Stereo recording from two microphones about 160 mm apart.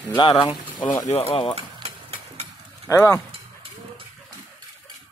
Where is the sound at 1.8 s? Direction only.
40° right (ahead or behind).